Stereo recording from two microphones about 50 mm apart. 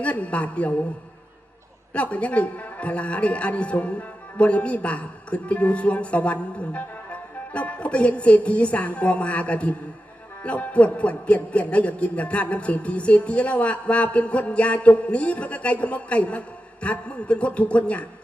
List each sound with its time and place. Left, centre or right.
0.0 s speech: left
1.9 s speech: left